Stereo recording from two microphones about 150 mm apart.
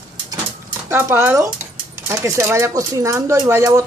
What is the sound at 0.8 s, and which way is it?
Speech, 15° right (ahead or behind).